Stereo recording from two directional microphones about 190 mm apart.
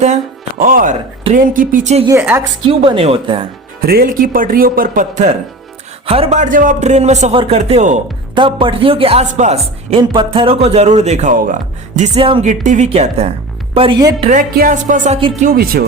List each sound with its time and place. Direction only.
0.6 s speech: 45° right (ahead or behind)
2.0 s a woman's voice: 10° right (ahead or behind)
2.4 s speech: 30° right (ahead or behind)
3.8 s speech: 55° right (ahead or behind); by 6.4 s 30° right (ahead or behind)
6.4 s speech: 45° right (ahead or behind)
8.4 s speech: 25° right (ahead or behind)
10.0 s speech: 25° right (ahead or behind); by 15.8 s 50° right (ahead or behind)